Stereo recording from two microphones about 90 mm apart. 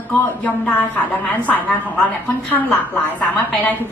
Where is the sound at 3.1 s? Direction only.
20° left (ahead or behind).